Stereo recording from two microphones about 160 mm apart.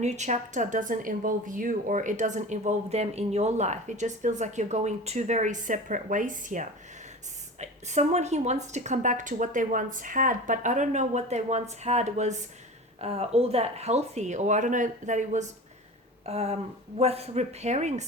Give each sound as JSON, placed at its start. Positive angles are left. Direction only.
{"t": 0.0, "sound": "a woman's voice", "side_deg": -45}